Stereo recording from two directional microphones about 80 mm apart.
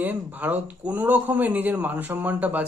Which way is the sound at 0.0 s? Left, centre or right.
Right.